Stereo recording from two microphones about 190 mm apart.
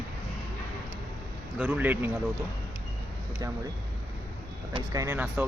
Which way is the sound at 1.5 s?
5° right (ahead or behind).